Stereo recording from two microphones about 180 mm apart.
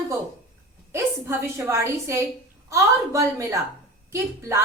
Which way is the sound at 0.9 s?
15° right (ahead or behind).